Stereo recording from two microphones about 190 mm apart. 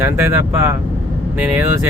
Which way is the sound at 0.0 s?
15° right (ahead or behind).